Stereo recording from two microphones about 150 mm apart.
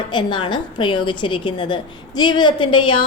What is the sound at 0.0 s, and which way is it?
A woman's voice, 30° left (ahead or behind).